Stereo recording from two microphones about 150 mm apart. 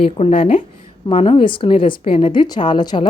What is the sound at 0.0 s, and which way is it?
A woman's voice, 40° left (ahead or behind).